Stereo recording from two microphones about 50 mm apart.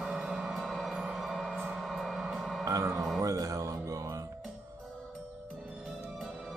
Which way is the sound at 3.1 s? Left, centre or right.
Right.